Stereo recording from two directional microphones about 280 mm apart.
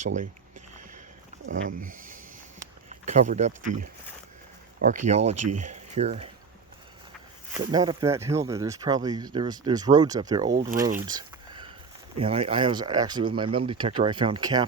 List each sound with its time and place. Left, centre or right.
1.5 s speech: right
1.8 s speech: right
4.8 s speech: right
5.4 s speech: right
5.7 s speech: right
7.7 s speech: centre
10.8 s a sound: centre
12.2 s speech: right